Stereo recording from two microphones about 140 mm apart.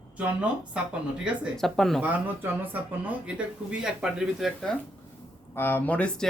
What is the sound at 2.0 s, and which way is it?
Speech, 10° right (ahead or behind).